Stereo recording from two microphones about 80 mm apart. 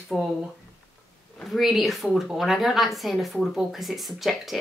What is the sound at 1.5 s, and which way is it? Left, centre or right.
A woman's voice, centre.